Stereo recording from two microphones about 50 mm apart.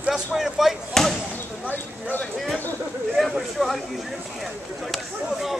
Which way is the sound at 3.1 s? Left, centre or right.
Centre.